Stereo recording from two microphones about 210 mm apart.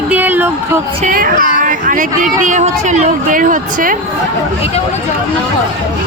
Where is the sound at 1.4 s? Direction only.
40° left (ahead or behind).